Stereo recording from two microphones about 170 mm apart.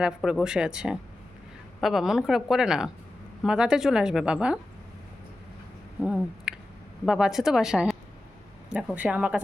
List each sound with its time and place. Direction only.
0.0 s a woman's voice: 5° right (ahead or behind)
6.0 s a sound: 5° right (ahead or behind)
7.0 s a woman's voice: 5° right (ahead or behind)
9.0 s speech: 10° right (ahead or behind)